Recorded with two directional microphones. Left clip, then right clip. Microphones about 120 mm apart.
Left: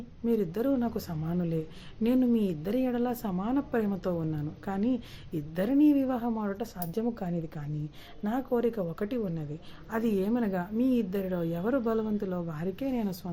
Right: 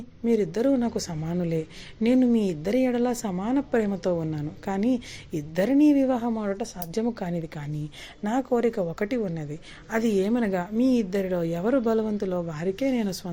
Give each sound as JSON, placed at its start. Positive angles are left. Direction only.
{"t": 0.3, "sound": "a woman's voice", "side_deg": -20}
{"t": 6.4, "sound": "a woman's voice", "side_deg": -35}